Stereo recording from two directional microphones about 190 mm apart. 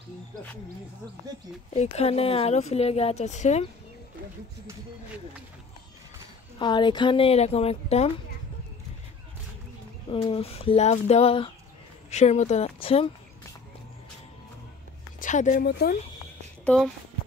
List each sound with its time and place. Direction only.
1.7 s speech: 35° left (ahead or behind)
6.6 s a woman's voice: 25° left (ahead or behind)
10.0 s speech: 30° left (ahead or behind)
15.1 s a sound: 40° left (ahead or behind)
15.6 s speech: 60° left (ahead or behind)
16.6 s speech: 5° left (ahead or behind)